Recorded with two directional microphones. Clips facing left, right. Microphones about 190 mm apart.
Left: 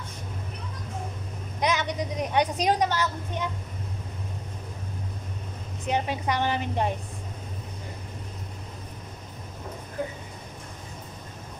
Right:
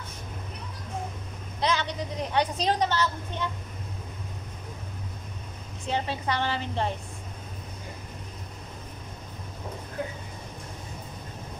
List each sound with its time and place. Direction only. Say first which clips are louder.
1.6 s a woman's voice: left 1 dB; 15° left (ahead or behind)
5.9 s a woman's voice: left 2 dB; 15° left (ahead or behind)